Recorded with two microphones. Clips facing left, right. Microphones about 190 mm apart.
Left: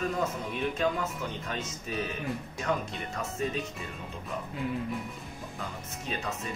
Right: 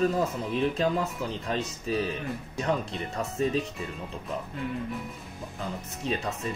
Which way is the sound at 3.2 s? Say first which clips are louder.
Right 5 dB; 35° right (ahead or behind).